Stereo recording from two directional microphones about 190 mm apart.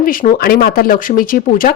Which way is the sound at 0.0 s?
45° left (ahead or behind).